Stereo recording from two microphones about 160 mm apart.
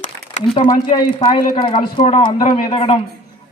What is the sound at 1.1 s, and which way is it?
Speech, 30° left (ahead or behind).